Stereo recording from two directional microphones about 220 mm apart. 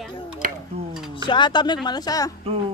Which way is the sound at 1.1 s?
20° left (ahead or behind).